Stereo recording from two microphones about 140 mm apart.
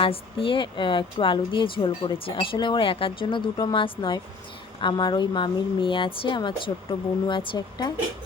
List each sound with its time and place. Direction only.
0.0 s speech: 40° left (ahead or behind)